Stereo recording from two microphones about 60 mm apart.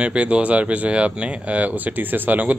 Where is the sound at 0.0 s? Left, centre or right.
Centre.